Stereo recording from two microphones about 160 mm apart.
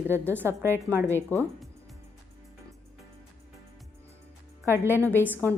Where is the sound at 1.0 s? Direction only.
10° left (ahead or behind).